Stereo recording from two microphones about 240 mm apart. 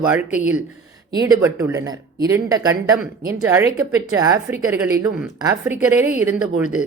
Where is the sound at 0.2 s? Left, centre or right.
Centre.